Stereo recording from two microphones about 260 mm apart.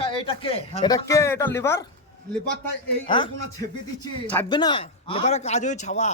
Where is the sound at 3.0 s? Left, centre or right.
Centre.